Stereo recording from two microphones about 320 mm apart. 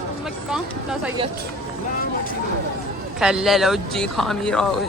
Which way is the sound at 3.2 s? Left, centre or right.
Centre.